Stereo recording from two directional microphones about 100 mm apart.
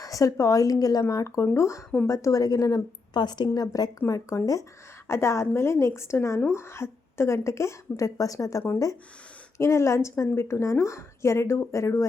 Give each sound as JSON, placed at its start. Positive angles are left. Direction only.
{"t": 0.0, "sound": "a woman's voice", "side_deg": 35}